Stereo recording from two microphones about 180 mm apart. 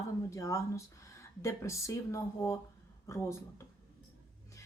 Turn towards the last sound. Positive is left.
turn(degrees=15)  # may be behind; listen again after turning